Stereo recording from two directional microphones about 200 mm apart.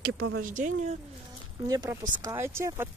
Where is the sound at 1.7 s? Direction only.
20° right (ahead or behind).